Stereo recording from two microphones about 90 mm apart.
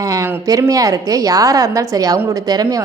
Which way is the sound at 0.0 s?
40° right (ahead or behind).